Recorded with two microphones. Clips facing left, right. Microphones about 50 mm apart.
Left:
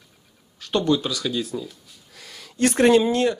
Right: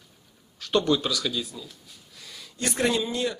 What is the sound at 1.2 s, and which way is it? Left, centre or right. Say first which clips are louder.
Speech: left 7 dB; centre.